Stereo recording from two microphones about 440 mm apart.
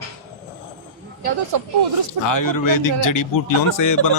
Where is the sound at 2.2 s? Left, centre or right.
Left.